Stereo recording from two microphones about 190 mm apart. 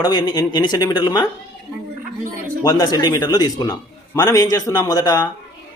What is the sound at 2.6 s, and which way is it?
Speech, 20° left (ahead or behind).